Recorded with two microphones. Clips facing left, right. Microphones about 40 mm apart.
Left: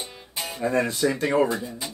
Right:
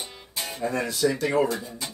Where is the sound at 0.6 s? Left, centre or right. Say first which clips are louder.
Left 2 dB; left.